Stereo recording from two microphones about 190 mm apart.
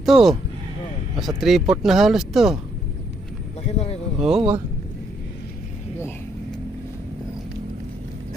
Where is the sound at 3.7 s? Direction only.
35° left (ahead or behind).